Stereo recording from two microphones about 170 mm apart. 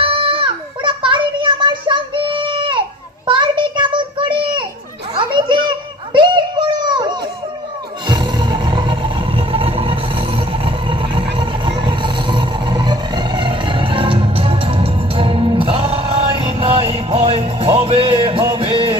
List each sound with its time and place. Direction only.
0.0 s child singing: 30° right (ahead or behind)
5.1 s children playing: 30° right (ahead or behind)
6.1 s a sound: 25° right (ahead or behind)
8.0 s music: 25° right (ahead or behind)